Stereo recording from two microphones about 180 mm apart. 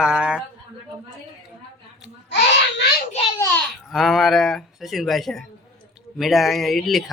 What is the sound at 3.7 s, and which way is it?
A child's voice, centre (ahead or behind).